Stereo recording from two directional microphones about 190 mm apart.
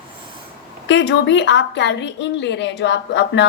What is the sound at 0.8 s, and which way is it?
Speech, 65° left (ahead or behind).